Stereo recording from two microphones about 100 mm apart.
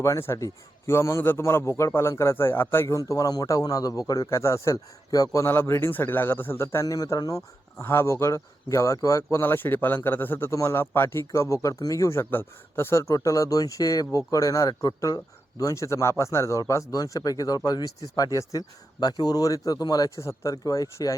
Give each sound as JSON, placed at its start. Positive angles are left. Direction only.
{"t": 0.0, "sound": "speech", "side_deg": 30}